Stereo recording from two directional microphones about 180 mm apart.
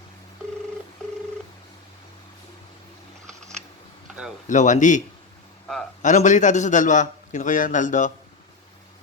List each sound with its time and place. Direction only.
4.4 s a man's voice: 45° left (ahead or behind)